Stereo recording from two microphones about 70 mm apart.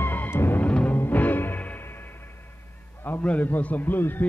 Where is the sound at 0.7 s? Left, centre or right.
Left.